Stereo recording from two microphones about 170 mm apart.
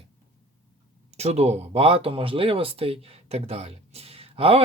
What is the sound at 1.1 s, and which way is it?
Speech, 40° right (ahead or behind).